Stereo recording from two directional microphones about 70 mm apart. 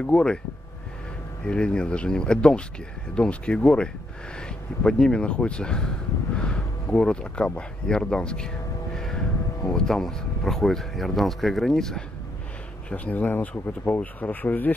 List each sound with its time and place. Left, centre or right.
0.0 s speech: centre
1.4 s speech: centre
8.9 s vehicle: centre
9.7 s speech: centre
12.9 s speech: left